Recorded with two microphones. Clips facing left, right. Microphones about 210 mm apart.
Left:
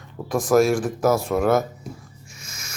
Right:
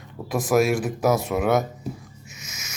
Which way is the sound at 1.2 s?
5° right (ahead or behind).